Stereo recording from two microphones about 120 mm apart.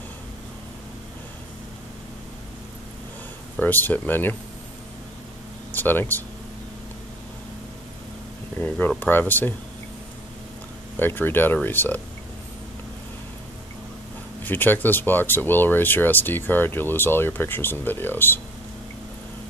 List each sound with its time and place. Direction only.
3.5 s speech: 15° left (ahead or behind)
5.7 s speech: 15° left (ahead or behind)
8.5 s speech: 15° left (ahead or behind)
11.0 s speech: 15° left (ahead or behind)
14.4 s speech: 15° left (ahead or behind)